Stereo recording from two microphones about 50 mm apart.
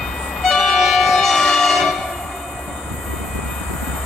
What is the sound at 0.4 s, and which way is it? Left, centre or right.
Train, centre.